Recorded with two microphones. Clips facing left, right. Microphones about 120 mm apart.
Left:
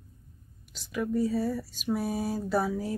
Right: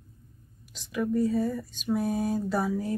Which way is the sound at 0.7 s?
Centre (ahead or behind).